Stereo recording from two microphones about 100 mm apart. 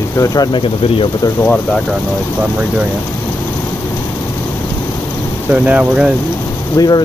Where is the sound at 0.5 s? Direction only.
65° left (ahead or behind).